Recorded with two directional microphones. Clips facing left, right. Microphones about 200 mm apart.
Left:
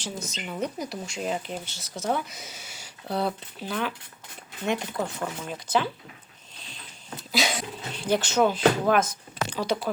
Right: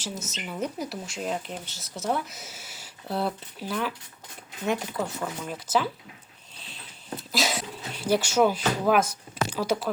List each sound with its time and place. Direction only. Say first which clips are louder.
0.2 s speech: left 2 dB; 5° right (ahead or behind)
7.2 s speech: left 1 dB; centre (ahead or behind)